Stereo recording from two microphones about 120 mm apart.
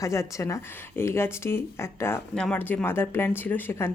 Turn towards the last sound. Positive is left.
turn(degrees=15)  # may be behind; listen again after turning